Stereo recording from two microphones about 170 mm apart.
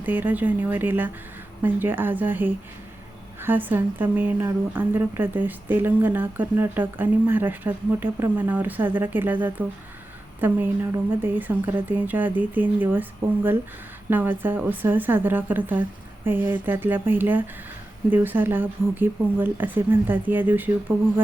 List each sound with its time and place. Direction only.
0.0 s a woman's voice: 10° right (ahead or behind)